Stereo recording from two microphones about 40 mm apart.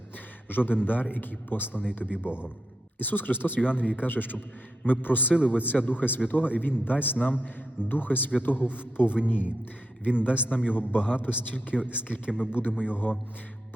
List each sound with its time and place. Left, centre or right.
0.4 s a man's voice: left
13.0 s speech: left